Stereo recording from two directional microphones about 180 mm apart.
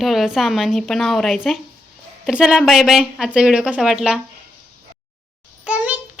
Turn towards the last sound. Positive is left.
turn(degrees=-5)  # may be behind; listen again after turning